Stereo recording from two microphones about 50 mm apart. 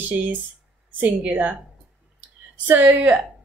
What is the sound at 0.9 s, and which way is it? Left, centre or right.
Speech, right.